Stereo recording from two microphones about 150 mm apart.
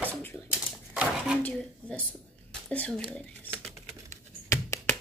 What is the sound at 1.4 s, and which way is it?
Speech, 5° left (ahead or behind).